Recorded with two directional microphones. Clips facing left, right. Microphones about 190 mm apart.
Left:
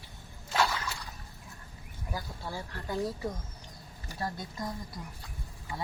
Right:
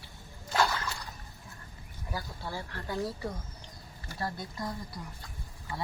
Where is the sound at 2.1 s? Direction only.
15° left (ahead or behind).